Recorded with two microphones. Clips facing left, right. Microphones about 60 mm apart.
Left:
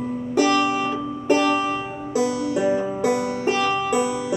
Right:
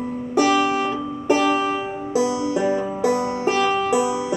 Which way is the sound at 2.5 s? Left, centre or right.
Centre.